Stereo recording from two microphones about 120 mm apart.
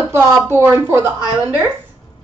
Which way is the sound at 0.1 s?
20° right (ahead or behind).